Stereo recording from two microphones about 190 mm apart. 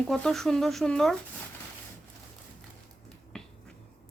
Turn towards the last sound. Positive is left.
turn(degrees=5)  # may be behind; listen again after turning